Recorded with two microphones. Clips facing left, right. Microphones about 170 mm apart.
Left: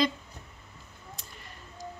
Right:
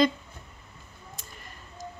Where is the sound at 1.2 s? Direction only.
50° right (ahead or behind).